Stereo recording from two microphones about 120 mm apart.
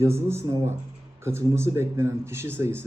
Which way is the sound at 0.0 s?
20° right (ahead or behind).